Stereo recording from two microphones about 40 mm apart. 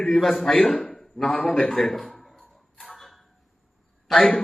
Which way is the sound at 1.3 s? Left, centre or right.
Left.